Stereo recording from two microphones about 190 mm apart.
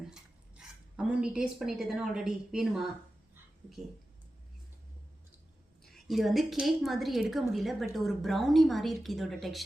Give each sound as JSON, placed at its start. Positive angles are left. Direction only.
{"t": 0.0, "sound": "speech", "side_deg": -5}
{"t": 5.8, "sound": "a woman's voice", "side_deg": 0}